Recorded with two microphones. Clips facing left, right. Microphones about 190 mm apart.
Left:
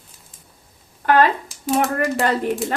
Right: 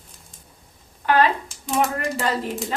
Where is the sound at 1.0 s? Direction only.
50° left (ahead or behind).